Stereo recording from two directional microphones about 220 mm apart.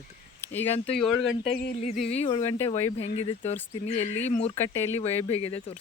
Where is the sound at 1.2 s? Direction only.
55° left (ahead or behind).